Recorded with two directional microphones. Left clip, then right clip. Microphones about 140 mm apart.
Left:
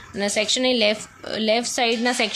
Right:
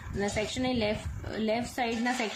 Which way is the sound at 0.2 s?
35° left (ahead or behind).